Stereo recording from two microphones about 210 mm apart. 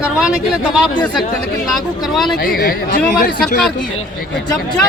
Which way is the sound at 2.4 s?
45° left (ahead or behind).